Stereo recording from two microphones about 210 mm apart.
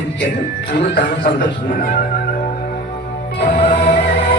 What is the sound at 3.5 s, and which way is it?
Music, 40° left (ahead or behind).